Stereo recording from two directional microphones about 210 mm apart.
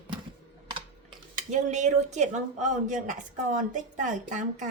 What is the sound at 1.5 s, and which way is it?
A woman's voice, 35° right (ahead or behind).